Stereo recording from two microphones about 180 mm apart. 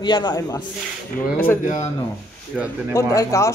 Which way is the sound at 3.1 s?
15° left (ahead or behind).